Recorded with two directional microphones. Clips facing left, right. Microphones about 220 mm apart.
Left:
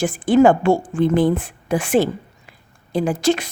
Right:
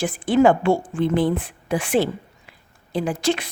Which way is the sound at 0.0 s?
45° left (ahead or behind).